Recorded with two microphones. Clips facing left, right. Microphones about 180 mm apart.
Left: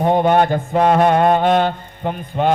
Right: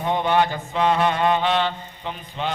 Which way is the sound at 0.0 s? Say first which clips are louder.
Left 6 dB; 50° left (ahead or behind).